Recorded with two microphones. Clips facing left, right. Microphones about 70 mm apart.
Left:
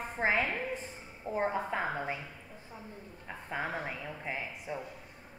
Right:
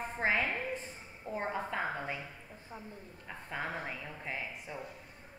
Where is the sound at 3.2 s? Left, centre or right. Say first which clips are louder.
Left 2 dB; centre.